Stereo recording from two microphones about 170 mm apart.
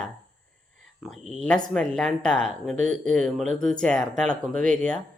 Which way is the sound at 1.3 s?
5° left (ahead or behind).